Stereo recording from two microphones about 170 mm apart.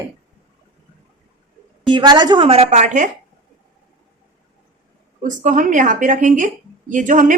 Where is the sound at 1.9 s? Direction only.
25° right (ahead or behind); by 3.1 s 45° right (ahead or behind).